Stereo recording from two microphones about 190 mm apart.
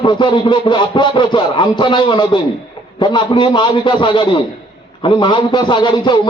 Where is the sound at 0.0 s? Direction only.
25° left (ahead or behind).